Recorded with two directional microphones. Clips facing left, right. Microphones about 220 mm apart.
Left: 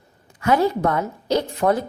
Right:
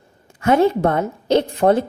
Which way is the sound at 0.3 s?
25° right (ahead or behind).